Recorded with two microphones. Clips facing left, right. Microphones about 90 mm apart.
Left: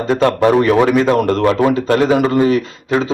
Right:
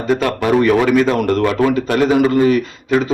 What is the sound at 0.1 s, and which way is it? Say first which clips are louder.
Speech: left 3 dB; 30° left (ahead or behind).